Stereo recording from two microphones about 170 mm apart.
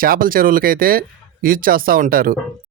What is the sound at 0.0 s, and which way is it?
Speech, 55° right (ahead or behind).